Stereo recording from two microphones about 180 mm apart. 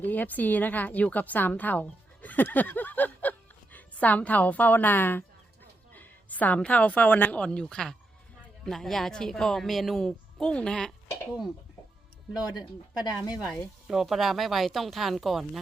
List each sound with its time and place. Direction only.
0.0 s a woman's voice: 10° left (ahead or behind)
12.3 s speech: 20° left (ahead or behind)
13.8 s speech: centre (ahead or behind)